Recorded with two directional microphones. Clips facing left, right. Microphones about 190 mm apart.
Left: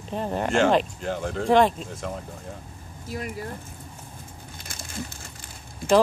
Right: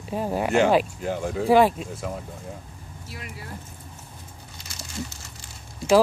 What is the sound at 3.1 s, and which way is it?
Speech, 45° left (ahead or behind).